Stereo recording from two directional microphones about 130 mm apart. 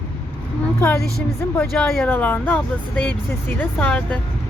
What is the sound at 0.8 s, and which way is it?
A woman's voice, 20° left (ahead or behind).